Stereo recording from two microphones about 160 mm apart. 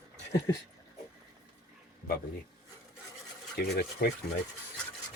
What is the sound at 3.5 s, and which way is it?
Speech, 90° left.